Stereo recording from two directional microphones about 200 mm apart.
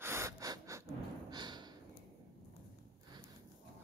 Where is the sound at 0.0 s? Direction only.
15° right (ahead or behind).